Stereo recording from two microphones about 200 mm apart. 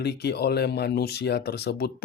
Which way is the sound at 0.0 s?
55° left (ahead or behind).